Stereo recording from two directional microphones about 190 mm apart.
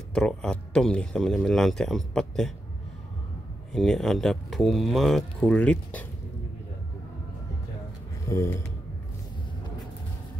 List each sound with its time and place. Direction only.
0.1 s speech: 5° left (ahead or behind)
3.7 s speech: 5° left (ahead or behind)
8.3 s speech: 15° left (ahead or behind)